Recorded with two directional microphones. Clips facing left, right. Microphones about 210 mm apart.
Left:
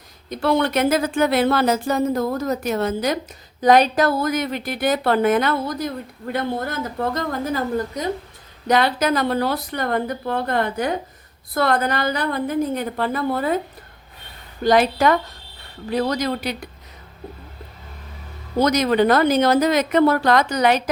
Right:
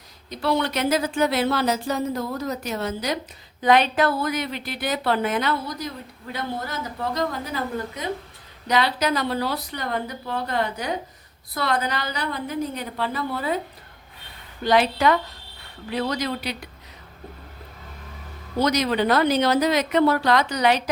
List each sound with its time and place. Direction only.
0.3 s a woman's voice: 50° left (ahead or behind)
14.6 s a woman's voice: 45° left (ahead or behind)
18.6 s a woman's voice: 50° left (ahead or behind)